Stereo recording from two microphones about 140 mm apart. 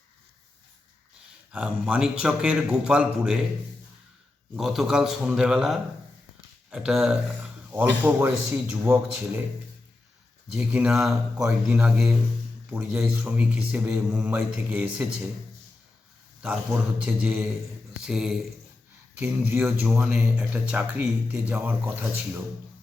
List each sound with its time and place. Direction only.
1.5 s a man's voice: 10° right (ahead or behind)
4.5 s a man's voice: centre (ahead or behind)
10.5 s a man's voice: 5° right (ahead or behind)
11.3 s a man's voice: 20° right (ahead or behind)
11.8 s a man's voice: 5° right (ahead or behind)
17.0 s a man's voice: 10° right (ahead or behind)
19.2 s a man's voice: 15° right (ahead or behind)